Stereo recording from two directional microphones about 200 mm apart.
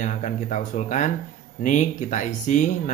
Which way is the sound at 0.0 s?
35° left (ahead or behind).